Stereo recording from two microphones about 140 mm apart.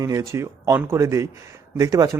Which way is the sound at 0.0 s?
25° right (ahead or behind).